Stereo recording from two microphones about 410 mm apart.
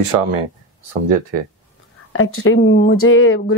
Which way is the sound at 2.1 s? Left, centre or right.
Left.